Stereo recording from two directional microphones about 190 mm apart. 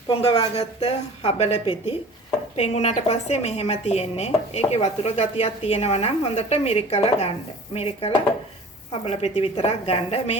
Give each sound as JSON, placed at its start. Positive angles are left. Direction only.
{"t": 0.1, "sound": "a woman's voice", "side_deg": 30}